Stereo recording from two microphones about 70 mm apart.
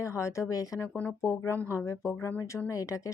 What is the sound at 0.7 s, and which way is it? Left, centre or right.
Speech, left.